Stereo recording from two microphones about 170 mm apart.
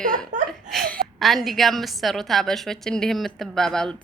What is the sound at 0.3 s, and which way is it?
Laughter, 50° right (ahead or behind).